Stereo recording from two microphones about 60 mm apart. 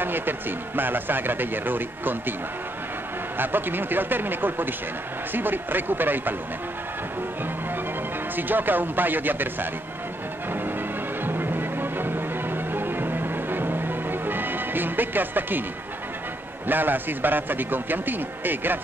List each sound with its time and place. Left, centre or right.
0.0 s speech: right
3.3 s speech: right
8.4 s speech: right
10.5 s music: right
16.6 s speech: right